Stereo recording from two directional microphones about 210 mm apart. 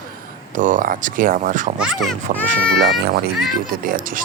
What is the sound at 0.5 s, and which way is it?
Speech, 40° right (ahead or behind).